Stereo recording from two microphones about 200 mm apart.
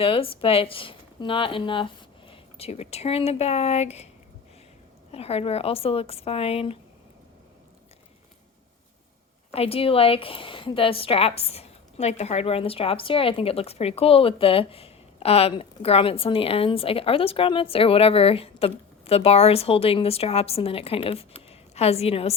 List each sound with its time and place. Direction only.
0.0 s speech: 25° left (ahead or behind)
5.1 s a woman's voice: 30° left (ahead or behind)
9.5 s a woman's voice: 30° left (ahead or behind)